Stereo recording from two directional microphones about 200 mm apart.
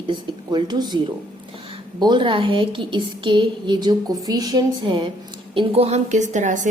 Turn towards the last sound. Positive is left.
turn(degrees=-40)  # may be behind; listen again after turning